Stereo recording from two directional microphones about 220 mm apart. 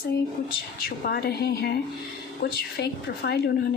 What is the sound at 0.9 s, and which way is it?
A woman's voice, 45° left (ahead or behind).